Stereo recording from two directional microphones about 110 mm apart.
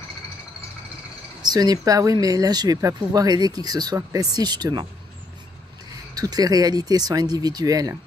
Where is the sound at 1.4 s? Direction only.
40° right (ahead or behind).